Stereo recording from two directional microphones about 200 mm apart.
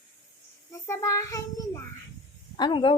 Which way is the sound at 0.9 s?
15° left (ahead or behind).